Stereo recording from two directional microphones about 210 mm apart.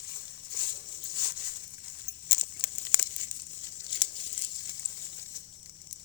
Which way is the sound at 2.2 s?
40° left (ahead or behind).